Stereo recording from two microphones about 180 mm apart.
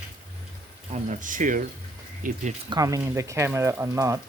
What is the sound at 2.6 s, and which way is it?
Speech, 20° right (ahead or behind).